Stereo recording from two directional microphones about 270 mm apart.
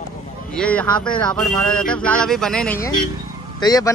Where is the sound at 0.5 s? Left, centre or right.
Centre.